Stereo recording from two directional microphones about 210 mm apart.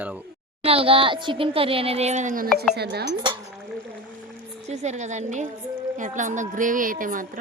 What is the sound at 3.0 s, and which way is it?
Speech, 20° right (ahead or behind).